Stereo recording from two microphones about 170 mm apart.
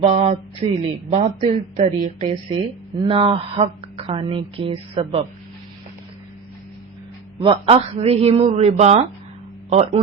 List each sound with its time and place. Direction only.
0.0 s speech: 35° right (ahead or behind)
3.0 s speech: 30° right (ahead or behind)
7.3 s speech: 30° right (ahead or behind)